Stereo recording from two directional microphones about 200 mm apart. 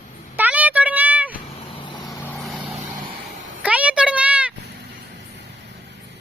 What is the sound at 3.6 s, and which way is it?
Speech, 5° right (ahead or behind).